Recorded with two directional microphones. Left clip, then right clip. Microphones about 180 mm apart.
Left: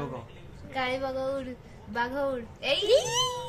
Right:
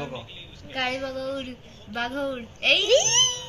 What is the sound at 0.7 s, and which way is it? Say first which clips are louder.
A woman's voice: right 2 dB; 45° left (ahead or behind).